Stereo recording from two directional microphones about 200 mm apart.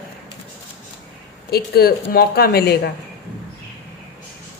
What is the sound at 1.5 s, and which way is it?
A man's voice, 50° left (ahead or behind).